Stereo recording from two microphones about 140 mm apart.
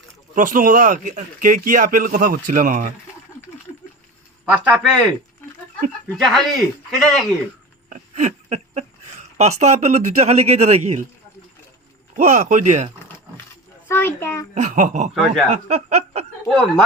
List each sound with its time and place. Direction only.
0.3 s speech: 75° right (ahead or behind)
4.4 s speech: 5° right (ahead or behind)
6.1 s speech: centre (ahead or behind)
7.9 s a sound: 60° right (ahead or behind)
9.4 s speech: 55° right (ahead or behind)
12.1 s speech: 60° right (ahead or behind)
13.8 s a child's voice: 15° left (ahead or behind)
14.5 s speech: 60° right (ahead or behind)
15.1 s speech: 5° right (ahead or behind)
15.4 s speech: 50° right (ahead or behind)